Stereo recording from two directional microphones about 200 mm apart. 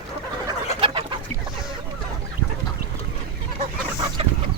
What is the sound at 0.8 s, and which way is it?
Chicken, 30° right (ahead or behind).